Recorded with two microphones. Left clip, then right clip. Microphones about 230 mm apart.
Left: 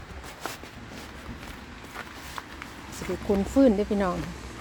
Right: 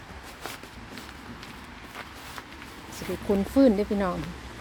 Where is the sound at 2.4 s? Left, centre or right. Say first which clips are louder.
Left 5 dB; centre.